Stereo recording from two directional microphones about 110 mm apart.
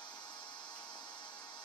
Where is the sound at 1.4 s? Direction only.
40° left (ahead or behind).